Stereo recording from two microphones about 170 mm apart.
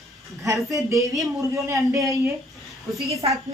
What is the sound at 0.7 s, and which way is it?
A woman's voice, 20° right (ahead or behind).